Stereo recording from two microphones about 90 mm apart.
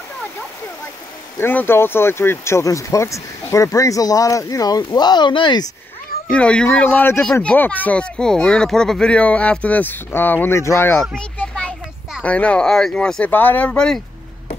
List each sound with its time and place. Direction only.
1.4 s speech: 25° left (ahead or behind); by 5.7 s 55° left (ahead or behind)
6.3 s speech: 10° left (ahead or behind); by 11.0 s 30° left (ahead or behind)
11.0 s a child's voice: 10° left (ahead or behind)
13.3 s speech: 20° left (ahead or behind)